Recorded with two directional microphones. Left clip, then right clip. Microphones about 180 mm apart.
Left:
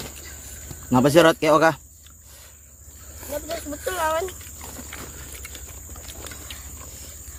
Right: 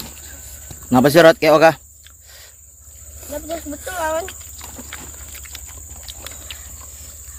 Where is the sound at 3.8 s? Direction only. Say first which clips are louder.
Right 1 dB; 50° left (ahead or behind).